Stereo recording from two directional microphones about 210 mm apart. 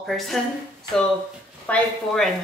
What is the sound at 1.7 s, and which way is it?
Speech, centre (ahead or behind).